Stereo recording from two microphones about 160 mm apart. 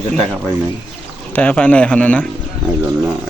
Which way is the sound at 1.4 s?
10° left (ahead or behind).